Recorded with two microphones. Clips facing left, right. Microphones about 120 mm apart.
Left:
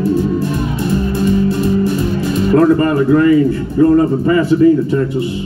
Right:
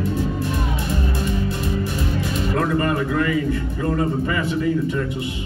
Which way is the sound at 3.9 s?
35° left (ahead or behind).